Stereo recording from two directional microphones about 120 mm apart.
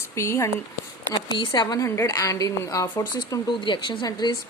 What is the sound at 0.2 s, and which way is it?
Speech, 25° left (ahead or behind).